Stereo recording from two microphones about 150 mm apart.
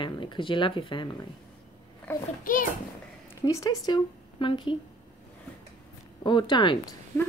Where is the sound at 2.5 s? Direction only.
65° left (ahead or behind).